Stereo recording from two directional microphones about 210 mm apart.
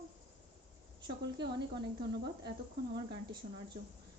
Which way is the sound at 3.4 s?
35° right (ahead or behind).